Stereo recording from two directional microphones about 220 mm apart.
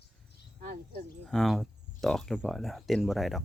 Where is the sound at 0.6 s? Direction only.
40° right (ahead or behind).